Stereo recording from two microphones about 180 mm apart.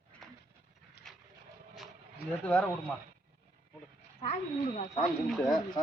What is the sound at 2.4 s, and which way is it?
Speech, 5° left (ahead or behind).